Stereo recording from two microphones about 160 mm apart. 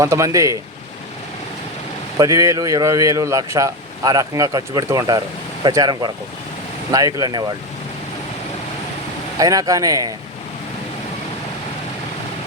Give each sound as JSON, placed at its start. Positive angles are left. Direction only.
{"t": 0.0, "sound": "a man's voice", "side_deg": -20}
{"t": 2.1, "sound": "a man's voice", "side_deg": -20}
{"t": 9.4, "sound": "a man's voice", "side_deg": -20}